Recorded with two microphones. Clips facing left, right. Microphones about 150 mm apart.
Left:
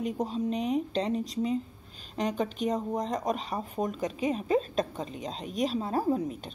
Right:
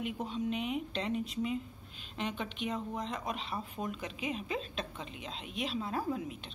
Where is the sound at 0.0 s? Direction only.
40° left (ahead or behind).